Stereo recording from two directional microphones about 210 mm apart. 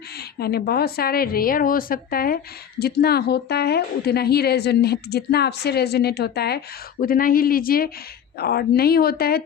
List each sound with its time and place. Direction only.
0.3 s a woman's voice: 50° left (ahead or behind)